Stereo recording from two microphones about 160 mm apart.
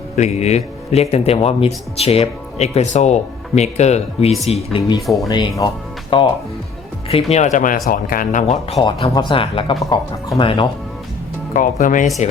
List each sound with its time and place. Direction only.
0.2 s speech: 45° left (ahead or behind)
5.3 s speech: 25° left (ahead or behind); by 8.5 s 55° left (ahead or behind)
8.7 s speech: 40° left (ahead or behind)
11.5 s speech: 55° left (ahead or behind)